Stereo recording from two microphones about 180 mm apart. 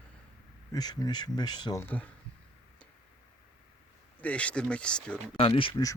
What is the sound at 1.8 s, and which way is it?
Speech, 10° left (ahead or behind).